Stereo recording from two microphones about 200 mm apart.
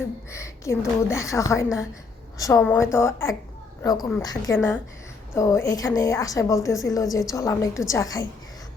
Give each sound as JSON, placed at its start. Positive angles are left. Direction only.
{"t": 0.3, "sound": "a woman's voice", "side_deg": 15}